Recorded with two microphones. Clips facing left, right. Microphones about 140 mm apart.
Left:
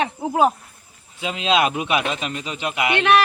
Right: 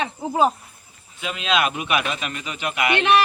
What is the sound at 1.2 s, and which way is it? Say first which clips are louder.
A man's voice: left 3 dB; 30° left (ahead or behind).